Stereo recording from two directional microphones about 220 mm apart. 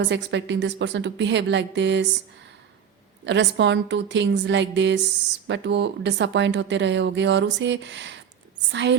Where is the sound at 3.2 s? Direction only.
55° right (ahead or behind).